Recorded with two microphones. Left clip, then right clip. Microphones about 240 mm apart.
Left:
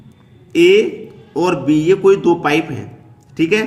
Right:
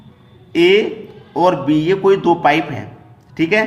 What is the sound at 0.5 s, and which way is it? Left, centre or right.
A man's voice, centre.